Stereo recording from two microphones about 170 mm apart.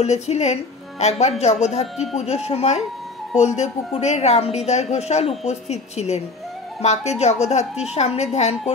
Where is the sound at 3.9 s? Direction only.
40° left (ahead or behind).